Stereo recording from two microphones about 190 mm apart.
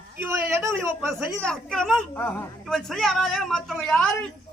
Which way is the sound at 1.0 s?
Centre (ahead or behind).